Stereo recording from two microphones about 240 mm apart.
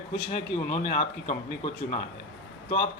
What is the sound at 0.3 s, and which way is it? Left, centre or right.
A man's voice, left.